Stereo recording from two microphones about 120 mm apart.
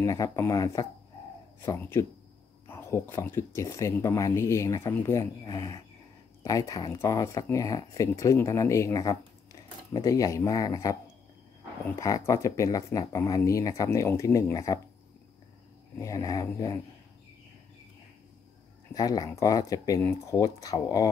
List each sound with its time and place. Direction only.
0.0 s speech: 30° left (ahead or behind)
16.0 s speech: 30° left (ahead or behind)
18.9 s speech: 30° left (ahead or behind)